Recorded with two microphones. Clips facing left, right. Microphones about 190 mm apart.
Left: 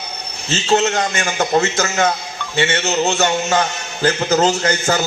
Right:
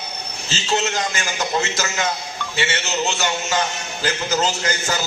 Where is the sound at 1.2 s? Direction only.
55° left (ahead or behind).